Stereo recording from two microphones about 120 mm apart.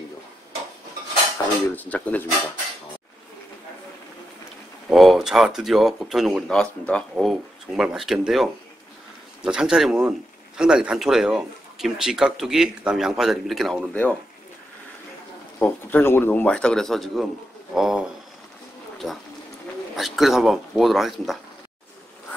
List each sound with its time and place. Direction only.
1.4 s dishes: 25° left (ahead or behind)
1.8 s speech: 10° left (ahead or behind)
4.8 s speech: centre (ahead or behind)
7.2 s speech: 5° right (ahead or behind)
15.6 s speech: 15° left (ahead or behind)
16.5 s speech: 5° left (ahead or behind)